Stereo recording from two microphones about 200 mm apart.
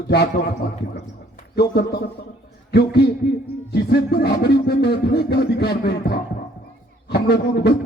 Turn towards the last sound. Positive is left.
turn(degrees=55)  # may be behind; listen again after turning